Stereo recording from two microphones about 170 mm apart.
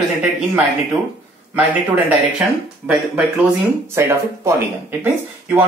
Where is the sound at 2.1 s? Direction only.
10° right (ahead or behind).